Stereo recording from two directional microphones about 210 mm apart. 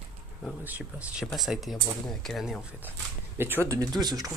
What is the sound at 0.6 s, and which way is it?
Speech, 10° right (ahead or behind).